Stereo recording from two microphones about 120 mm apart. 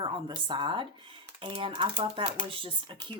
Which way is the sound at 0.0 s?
40° right (ahead or behind).